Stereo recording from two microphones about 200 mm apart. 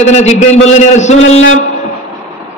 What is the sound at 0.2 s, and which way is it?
Speech, 35° left (ahead or behind).